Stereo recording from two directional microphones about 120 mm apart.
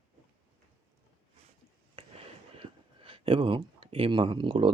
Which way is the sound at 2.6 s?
50° right (ahead or behind).